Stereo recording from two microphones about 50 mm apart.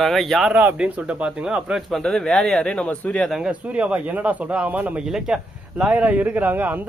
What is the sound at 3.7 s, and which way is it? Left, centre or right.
Speech, right.